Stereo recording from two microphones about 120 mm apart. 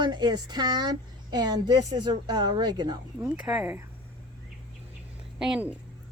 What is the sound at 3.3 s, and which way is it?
Speech, 10° right (ahead or behind).